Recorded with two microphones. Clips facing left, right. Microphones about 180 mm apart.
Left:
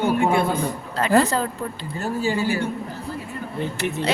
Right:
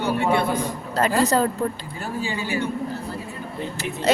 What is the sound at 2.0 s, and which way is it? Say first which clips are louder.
Speech: left 5 dB; 45° left (ahead or behind).